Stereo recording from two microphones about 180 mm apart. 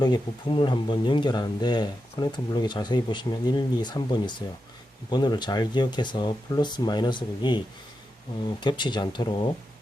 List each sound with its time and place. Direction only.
0.0 s speech: 25° left (ahead or behind)
8.6 s speech: 25° left (ahead or behind)